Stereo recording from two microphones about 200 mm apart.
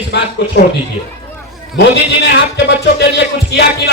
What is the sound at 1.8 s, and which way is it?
Speech, 55° left (ahead or behind).